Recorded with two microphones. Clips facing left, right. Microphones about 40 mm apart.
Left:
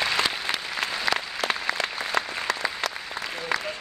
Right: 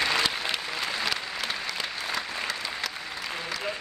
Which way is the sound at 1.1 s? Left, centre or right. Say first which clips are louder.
Left 5 dB; left.